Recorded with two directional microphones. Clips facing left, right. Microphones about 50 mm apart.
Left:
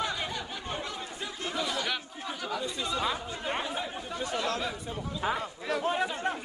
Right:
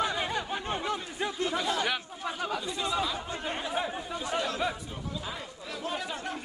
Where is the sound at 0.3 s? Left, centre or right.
Right.